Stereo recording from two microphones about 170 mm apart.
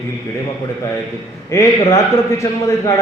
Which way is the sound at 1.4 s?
15° left (ahead or behind).